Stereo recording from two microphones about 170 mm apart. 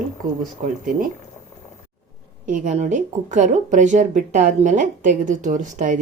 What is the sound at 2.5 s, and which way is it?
A woman's voice, 45° right (ahead or behind).